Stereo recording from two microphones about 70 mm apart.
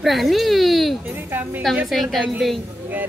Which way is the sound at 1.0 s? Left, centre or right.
Right.